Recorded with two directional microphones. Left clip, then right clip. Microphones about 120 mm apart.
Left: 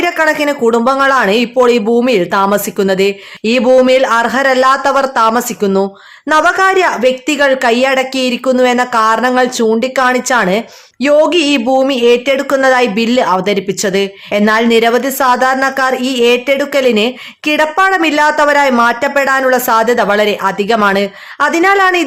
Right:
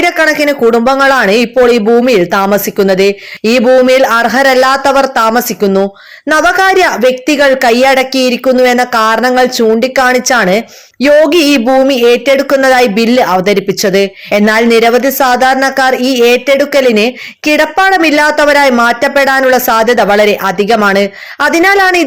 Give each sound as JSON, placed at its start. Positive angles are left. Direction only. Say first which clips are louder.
{"t": 0.0, "sound": "a woman's voice", "louder": "right 3 dB", "side_deg": -20}